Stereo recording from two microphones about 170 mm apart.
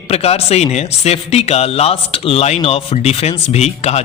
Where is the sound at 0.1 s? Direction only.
35° left (ahead or behind).